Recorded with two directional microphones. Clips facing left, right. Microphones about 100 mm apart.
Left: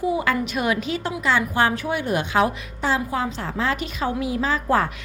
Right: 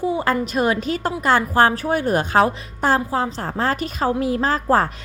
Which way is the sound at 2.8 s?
50° right (ahead or behind).